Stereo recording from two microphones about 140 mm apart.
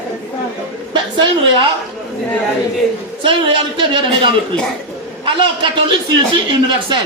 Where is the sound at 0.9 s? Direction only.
35° right (ahead or behind).